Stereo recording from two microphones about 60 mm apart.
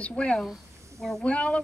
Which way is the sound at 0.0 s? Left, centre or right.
Centre.